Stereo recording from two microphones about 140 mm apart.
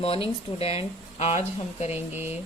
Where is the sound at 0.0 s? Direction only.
45° left (ahead or behind).